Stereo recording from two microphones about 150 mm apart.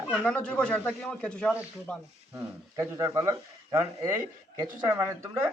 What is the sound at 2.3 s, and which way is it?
A man's voice, 20° right (ahead or behind).